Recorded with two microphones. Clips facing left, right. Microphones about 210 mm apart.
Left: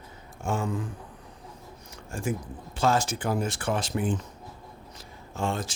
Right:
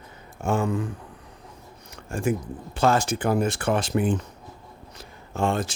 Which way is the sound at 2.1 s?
65° right (ahead or behind).